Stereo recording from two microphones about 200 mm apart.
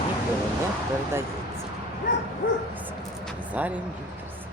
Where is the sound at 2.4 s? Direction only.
50° left (ahead or behind).